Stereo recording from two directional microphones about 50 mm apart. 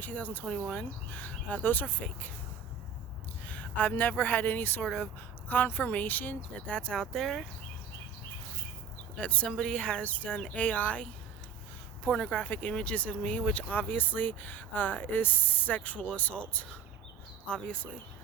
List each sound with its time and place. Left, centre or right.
0.0 s speech: left
0.4 s speech: left
3.4 s speech: left
6.7 s speech: centre
9.1 s speech: left
10.0 s speech: left